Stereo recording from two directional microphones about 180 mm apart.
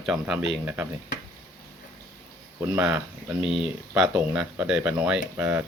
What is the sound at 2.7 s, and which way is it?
Speech, 10° right (ahead or behind).